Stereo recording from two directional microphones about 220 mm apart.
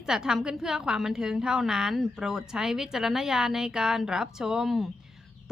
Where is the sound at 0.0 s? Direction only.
5° right (ahead or behind).